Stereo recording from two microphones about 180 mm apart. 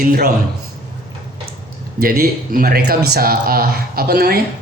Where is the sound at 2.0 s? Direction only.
55° right (ahead or behind).